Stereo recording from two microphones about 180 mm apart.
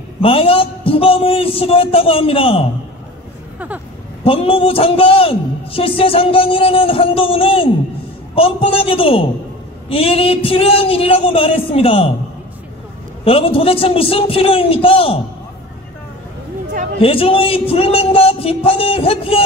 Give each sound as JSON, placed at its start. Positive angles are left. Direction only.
{"t": 0.2, "sound": "a man's voice", "side_deg": 30}
{"t": 3.5, "sound": "a sound", "side_deg": -10}
{"t": 4.2, "sound": "a man's voice", "side_deg": 30}
{"t": 13.2, "sound": "a man's voice", "side_deg": 30}
{"t": 17.0, "sound": "a man's voice", "side_deg": 30}